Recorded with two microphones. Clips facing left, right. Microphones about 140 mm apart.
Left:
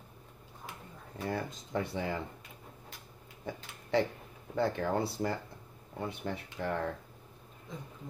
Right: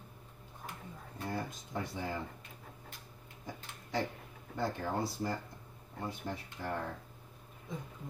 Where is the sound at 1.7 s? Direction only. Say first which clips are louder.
Left 8 dB; 70° left (ahead or behind).